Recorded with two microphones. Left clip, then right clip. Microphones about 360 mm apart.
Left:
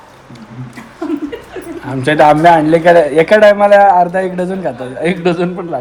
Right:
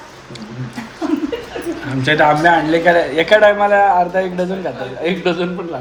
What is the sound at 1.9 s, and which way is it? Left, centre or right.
A man's voice, centre.